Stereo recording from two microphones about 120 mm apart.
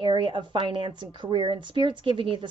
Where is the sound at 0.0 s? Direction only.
40° right (ahead or behind).